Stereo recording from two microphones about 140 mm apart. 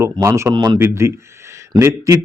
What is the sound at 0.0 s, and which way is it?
Speech, 20° right (ahead or behind).